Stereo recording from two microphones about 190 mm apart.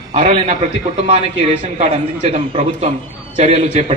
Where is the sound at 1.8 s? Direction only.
35° right (ahead or behind).